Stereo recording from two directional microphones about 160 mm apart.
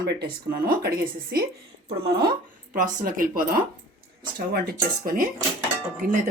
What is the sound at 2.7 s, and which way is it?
Speech, 60° right (ahead or behind).